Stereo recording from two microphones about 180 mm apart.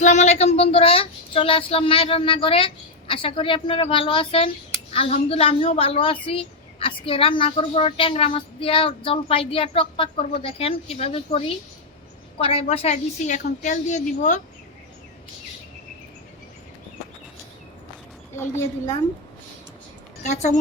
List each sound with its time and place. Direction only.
0.0 s speech: 40° left (ahead or behind)
20.2 s speech: 40° left (ahead or behind)